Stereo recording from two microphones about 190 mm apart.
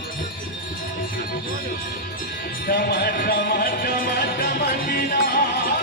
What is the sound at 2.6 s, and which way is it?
Music, 50° left (ahead or behind).